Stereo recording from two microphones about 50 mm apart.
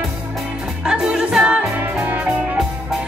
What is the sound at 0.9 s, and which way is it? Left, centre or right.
Music, centre.